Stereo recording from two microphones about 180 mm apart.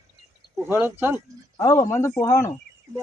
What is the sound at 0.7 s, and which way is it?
Speech, 10° right (ahead or behind).